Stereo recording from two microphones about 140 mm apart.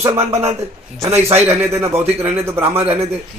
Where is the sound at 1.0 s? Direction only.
50° right (ahead or behind).